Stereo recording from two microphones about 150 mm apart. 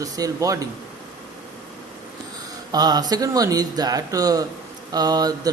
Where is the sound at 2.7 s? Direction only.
25° right (ahead or behind).